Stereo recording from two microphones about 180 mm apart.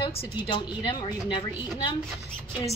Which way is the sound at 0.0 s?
25° left (ahead or behind).